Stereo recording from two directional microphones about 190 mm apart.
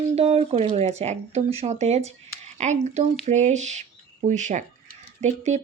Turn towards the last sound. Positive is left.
turn(degrees=-40)  # may be behind; listen again after turning